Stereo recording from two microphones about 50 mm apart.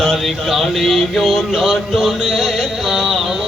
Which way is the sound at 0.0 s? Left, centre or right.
Centre.